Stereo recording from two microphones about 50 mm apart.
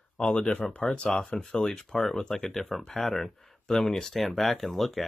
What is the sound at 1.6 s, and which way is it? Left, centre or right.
Speech, centre.